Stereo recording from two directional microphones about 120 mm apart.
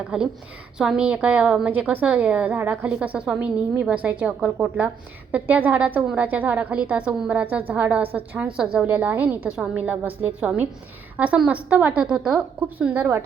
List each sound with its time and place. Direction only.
0.1 s a woman's voice: 5° right (ahead or behind)